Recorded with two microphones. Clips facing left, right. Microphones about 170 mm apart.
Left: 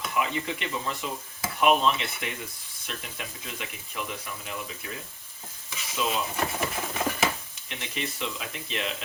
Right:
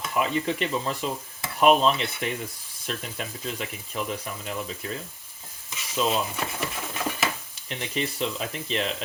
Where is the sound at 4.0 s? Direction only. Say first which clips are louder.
Right 5 dB; 35° right (ahead or behind).